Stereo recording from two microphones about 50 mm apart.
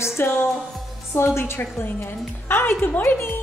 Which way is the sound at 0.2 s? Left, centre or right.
Left.